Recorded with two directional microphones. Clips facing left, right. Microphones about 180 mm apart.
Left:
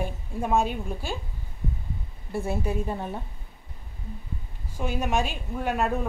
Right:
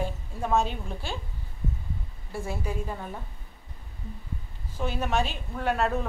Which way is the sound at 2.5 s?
20° left (ahead or behind).